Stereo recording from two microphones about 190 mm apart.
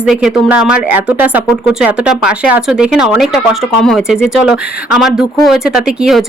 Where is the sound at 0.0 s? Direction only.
5° right (ahead or behind).